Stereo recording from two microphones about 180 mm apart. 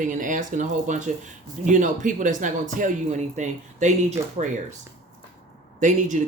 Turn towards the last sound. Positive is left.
turn(degrees=-45)  # may be behind; listen again after turning